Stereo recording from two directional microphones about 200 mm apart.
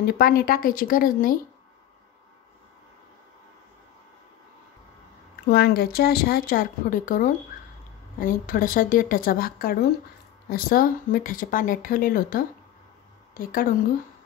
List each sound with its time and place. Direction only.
0.0 s speech: 45° left (ahead or behind)
5.3 s speech: 50° left (ahead or behind)
13.5 s speech: 45° left (ahead or behind)